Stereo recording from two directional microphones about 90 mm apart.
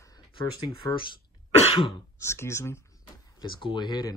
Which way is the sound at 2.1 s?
30° left (ahead or behind).